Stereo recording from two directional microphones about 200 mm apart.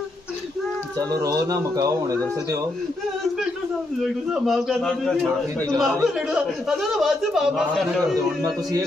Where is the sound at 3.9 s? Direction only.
Centre (ahead or behind).